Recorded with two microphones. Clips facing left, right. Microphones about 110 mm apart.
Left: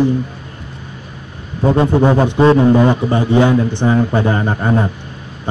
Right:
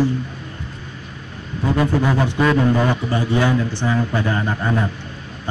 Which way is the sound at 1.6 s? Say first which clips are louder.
Left 6 dB; 30° left (ahead or behind).